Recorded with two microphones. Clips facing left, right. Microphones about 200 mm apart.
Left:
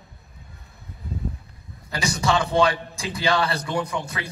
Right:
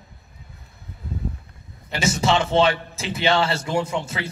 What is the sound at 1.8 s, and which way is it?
A man's voice, 20° right (ahead or behind).